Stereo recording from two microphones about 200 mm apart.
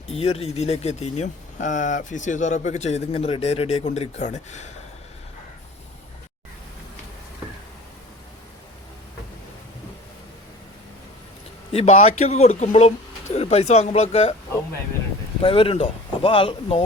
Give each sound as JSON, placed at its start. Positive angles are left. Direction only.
{"t": 0.1, "sound": "a man's voice", "side_deg": 30}
{"t": 11.7, "sound": "a man's voice", "side_deg": 30}
{"t": 15.4, "sound": "speech", "side_deg": 25}